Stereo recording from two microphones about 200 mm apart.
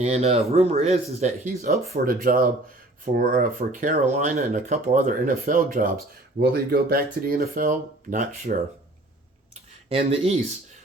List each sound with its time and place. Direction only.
0.0 s speech: 30° right (ahead or behind)
1.9 s speech: 45° right (ahead or behind)
6.4 s speech: 50° right (ahead or behind)
9.9 s speech: 30° right (ahead or behind)